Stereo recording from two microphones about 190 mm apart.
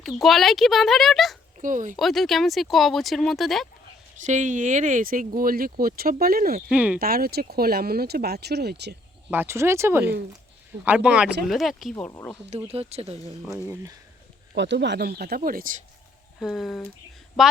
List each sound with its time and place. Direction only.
0.0 s speech: centre (ahead or behind)
1.5 s speech: 45° right (ahead or behind)
2.0 s speech: centre (ahead or behind)
4.2 s speech: 40° right (ahead or behind)
6.7 s speech: 5° right (ahead or behind)
7.0 s speech: 50° right (ahead or behind)
9.3 s speech: 10° right (ahead or behind)
11.9 s speech: 10° left (ahead or behind)
12.5 s speech: 30° right (ahead or behind)
13.7 s speech: 20° right (ahead or behind)
14.5 s speech: 65° right (ahead or behind); by 15.7 s 45° right (ahead or behind)
16.4 s speech: centre (ahead or behind)